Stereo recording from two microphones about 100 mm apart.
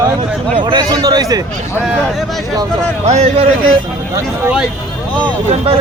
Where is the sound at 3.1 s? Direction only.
90° right.